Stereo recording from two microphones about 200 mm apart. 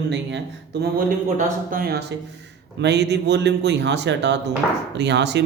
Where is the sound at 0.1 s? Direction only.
60° right (ahead or behind).